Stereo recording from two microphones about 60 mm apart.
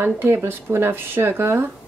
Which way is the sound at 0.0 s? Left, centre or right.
Right.